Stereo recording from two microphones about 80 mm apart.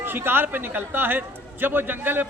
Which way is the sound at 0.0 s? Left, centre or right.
Right.